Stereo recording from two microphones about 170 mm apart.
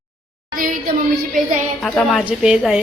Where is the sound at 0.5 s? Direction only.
55° right (ahead or behind).